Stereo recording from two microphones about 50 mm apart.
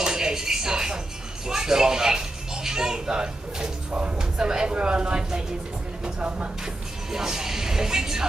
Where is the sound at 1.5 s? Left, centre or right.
Centre.